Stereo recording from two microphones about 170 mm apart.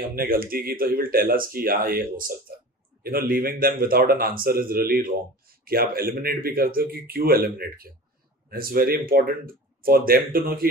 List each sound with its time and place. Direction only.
0.2 s speech: 60° right (ahead or behind)